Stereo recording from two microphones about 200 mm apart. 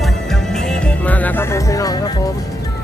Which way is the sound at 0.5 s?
5° left (ahead or behind).